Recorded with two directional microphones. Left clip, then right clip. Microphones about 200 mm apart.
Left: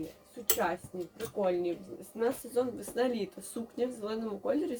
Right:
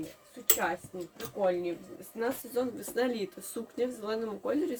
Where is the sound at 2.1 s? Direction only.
20° right (ahead or behind).